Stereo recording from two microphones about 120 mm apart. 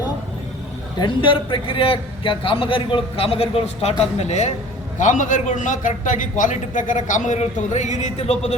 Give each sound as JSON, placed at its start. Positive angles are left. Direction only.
{"t": 0.9, "sound": "a man's voice", "side_deg": 45}
{"t": 4.9, "sound": "a man's voice", "side_deg": 90}